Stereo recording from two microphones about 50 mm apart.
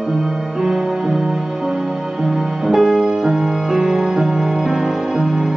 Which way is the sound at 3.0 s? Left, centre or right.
Right.